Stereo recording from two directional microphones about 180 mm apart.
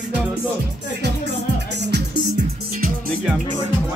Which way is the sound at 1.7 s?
70° right (ahead or behind).